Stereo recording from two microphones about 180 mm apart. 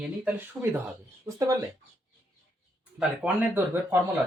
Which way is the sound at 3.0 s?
10° right (ahead or behind).